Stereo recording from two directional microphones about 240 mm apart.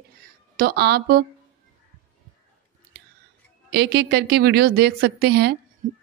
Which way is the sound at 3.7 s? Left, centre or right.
Right.